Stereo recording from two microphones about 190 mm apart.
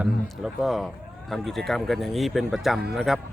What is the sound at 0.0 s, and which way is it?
A man's voice, 5° right (ahead or behind).